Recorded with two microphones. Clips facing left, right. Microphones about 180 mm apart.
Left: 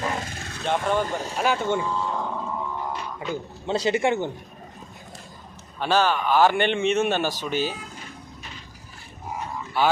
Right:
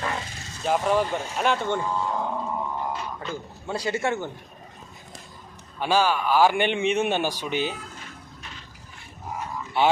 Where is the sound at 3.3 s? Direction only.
20° left (ahead or behind).